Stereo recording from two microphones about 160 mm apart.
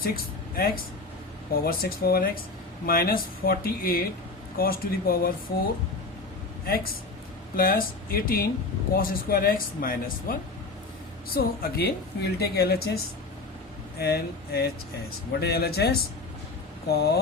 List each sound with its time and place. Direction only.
1.6 s speech: 70° left (ahead or behind)
6.7 s speech: 65° left (ahead or behind)
11.3 s speech: 75° left (ahead or behind)
14.0 s speech: 90° left
16.9 s speech: 90° left